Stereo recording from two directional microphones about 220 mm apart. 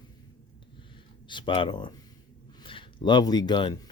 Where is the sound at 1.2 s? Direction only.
20° left (ahead or behind).